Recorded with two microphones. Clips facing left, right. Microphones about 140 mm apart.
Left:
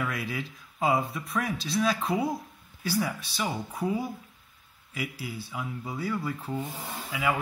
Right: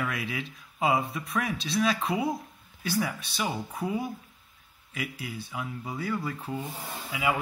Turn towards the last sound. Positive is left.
turn(degrees=0)  # may be behind; listen again after turning